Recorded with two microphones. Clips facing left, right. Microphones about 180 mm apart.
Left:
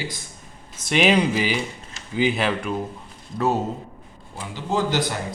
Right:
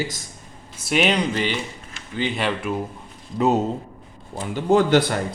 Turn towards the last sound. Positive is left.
turn(degrees=-60)  # may be behind; listen again after turning